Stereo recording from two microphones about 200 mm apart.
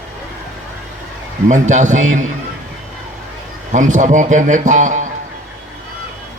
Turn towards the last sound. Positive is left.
turn(degrees=-40)  # may be behind; listen again after turning